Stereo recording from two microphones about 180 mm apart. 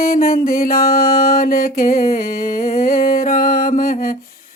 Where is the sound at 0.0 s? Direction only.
50° left (ahead or behind).